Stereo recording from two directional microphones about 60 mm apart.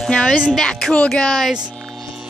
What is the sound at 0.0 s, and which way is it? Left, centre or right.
Speech, centre.